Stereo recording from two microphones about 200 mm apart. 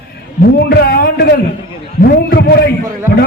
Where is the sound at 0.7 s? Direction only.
55° left (ahead or behind).